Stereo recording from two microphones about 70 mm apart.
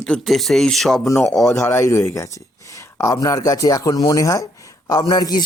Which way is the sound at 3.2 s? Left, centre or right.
Left.